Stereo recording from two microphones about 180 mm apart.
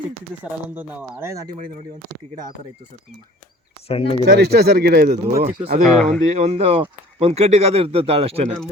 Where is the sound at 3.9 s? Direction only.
30° left (ahead or behind).